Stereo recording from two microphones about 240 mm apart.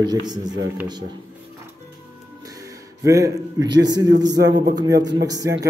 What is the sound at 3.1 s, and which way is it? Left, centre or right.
Speech, centre.